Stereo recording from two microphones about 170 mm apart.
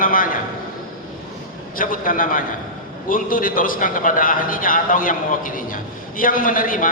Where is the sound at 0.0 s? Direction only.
55° left (ahead or behind).